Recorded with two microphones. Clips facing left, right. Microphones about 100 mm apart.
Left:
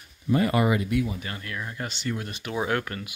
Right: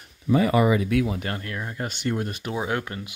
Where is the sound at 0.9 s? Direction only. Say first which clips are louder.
Right 3 dB; 80° right; by 1.4 s 65° right (ahead or behind).